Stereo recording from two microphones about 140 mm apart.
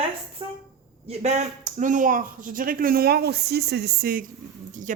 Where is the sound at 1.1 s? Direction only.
55° right (ahead or behind); by 4.2 s 90° right.